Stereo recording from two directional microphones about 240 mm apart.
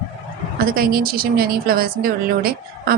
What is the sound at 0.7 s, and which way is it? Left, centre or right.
A woman's voice, right.